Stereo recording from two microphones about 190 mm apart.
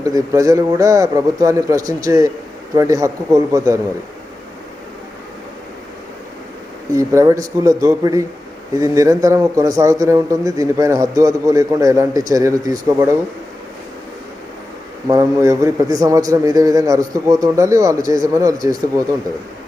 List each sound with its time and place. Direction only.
0.0 s a man's voice: 15° right (ahead or behind)
6.9 s a man's voice: 15° right (ahead or behind)
15.0 s a man's voice: 15° right (ahead or behind)